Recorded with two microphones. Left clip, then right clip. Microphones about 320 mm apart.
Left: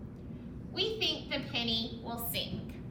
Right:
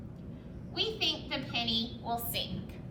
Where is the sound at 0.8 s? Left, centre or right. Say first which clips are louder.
Even; centre.